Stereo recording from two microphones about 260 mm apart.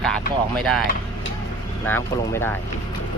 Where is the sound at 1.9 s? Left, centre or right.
Centre.